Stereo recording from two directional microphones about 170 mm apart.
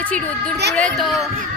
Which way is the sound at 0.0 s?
10° left (ahead or behind).